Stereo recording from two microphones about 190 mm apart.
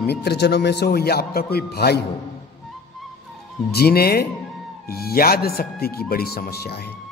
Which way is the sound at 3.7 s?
55° left (ahead or behind).